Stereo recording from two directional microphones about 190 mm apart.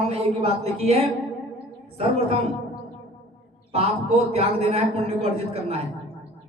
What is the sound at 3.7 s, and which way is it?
Speech, 30° right (ahead or behind).